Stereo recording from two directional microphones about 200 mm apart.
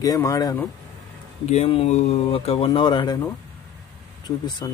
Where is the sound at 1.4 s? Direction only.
30° left (ahead or behind).